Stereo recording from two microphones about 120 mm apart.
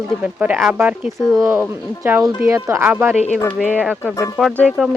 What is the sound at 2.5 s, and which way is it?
Speech, 20° right (ahead or behind).